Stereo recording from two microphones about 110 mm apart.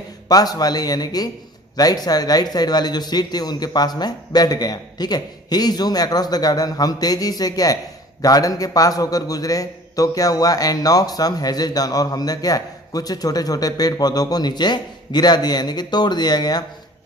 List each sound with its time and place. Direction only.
0.3 s speech: 35° left (ahead or behind)